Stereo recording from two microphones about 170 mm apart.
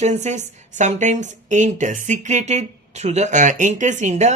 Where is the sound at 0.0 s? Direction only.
40° right (ahead or behind).